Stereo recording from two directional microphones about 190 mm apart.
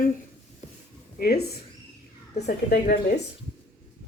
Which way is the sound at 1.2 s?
55° left (ahead or behind).